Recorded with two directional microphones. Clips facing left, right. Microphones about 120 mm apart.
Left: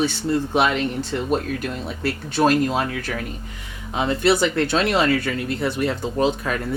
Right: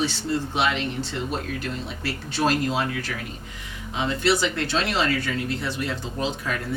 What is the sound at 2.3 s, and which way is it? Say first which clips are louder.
Speech: left 5 dB; 50° left (ahead or behind).